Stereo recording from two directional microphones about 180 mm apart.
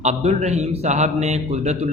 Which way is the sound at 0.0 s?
40° right (ahead or behind).